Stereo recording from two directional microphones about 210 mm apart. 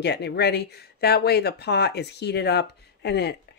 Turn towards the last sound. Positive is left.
turn(degrees=50)  # may be behind; listen again after turning